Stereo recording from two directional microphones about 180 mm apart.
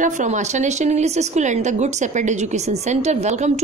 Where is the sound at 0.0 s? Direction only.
45° right (ahead or behind).